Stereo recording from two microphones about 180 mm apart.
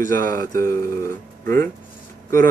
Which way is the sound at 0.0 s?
50° right (ahead or behind).